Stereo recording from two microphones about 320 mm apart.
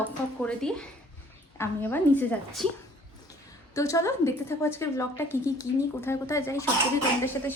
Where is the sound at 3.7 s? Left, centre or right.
Centre.